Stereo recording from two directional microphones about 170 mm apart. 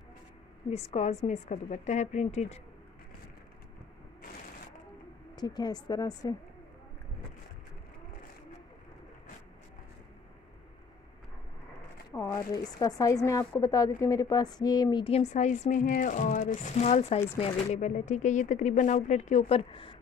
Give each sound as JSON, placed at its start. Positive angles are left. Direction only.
{"t": 0.7, "sound": "a woman's voice", "side_deg": 40}
{"t": 5.3, "sound": "speech", "side_deg": 25}
{"t": 12.1, "sound": "speech", "side_deg": 20}
{"t": 19.7, "sound": "a sound", "side_deg": 30}